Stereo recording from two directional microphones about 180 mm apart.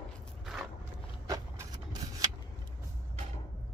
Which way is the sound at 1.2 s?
20° right (ahead or behind).